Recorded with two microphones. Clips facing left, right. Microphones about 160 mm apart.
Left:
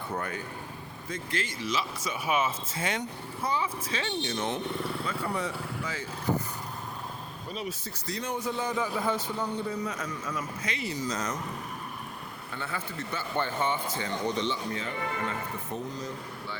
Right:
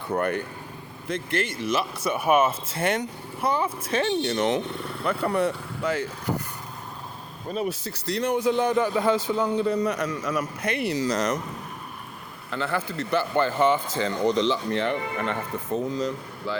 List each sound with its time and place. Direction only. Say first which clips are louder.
0.1 s speech: right 10 dB; 65° right (ahead or behind)
3.6 s speech: right 7 dB; 55° right (ahead or behind); by 4.6 s 90° right
5.0 s a man's voice: right 8 dB; 65° right (ahead or behind)
7.7 s a man's voice: right 7 dB; 75° right (ahead or behind)
12.5 s speech: right 9 dB; 85° right
16.0 s speech: right 8 dB; 90° right